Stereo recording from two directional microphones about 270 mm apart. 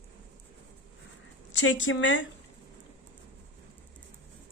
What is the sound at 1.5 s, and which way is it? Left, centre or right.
Speech, left.